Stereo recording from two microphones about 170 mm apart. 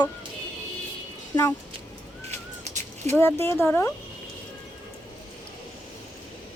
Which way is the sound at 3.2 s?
15° left (ahead or behind).